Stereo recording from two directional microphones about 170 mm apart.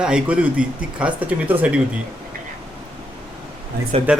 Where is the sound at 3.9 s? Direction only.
35° right (ahead or behind).